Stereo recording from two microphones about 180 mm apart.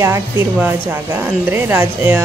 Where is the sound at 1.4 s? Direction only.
10° right (ahead or behind).